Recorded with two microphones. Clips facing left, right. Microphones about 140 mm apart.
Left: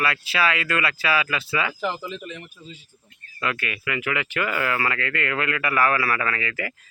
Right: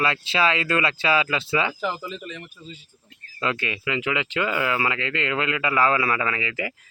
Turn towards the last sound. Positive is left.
turn(degrees=-20)  # may be behind; listen again after turning